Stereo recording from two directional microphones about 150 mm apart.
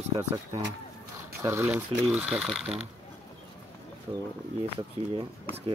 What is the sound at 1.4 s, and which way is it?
Speech, 15° right (ahead or behind).